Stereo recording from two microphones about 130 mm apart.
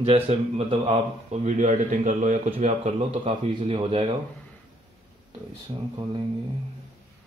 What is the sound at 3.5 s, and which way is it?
Speech, 40° right (ahead or behind).